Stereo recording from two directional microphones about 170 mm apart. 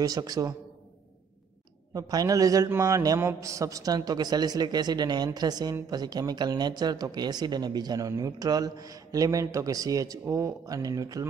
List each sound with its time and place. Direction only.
0.0 s a man's voice: 20° right (ahead or behind)
2.0 s a man's voice: 20° right (ahead or behind)